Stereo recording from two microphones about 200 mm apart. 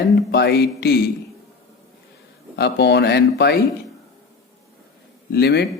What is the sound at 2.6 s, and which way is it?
Speech, 55° left (ahead or behind).